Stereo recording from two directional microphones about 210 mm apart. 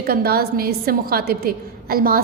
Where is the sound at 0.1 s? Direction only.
45° right (ahead or behind).